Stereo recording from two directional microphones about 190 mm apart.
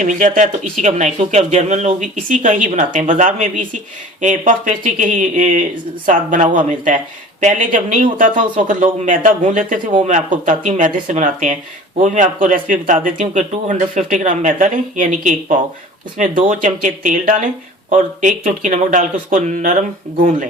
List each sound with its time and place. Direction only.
0.0 s speech: 40° right (ahead or behind)